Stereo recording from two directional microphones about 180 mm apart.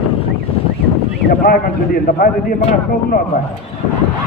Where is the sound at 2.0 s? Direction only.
55° left (ahead or behind).